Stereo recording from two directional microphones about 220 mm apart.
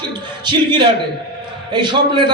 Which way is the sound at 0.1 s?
20° right (ahead or behind).